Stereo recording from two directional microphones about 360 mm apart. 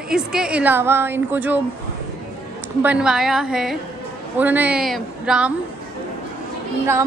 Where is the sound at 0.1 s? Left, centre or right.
Centre.